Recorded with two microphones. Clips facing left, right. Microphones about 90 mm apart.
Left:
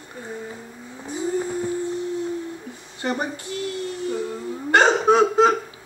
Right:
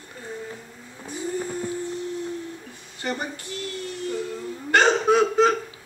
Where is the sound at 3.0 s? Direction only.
20° left (ahead or behind).